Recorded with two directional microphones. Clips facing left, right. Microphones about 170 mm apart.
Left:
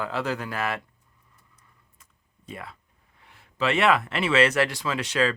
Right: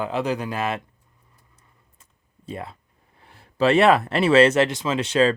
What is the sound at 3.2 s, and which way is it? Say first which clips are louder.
Speech: right 7 dB; 35° right (ahead or behind).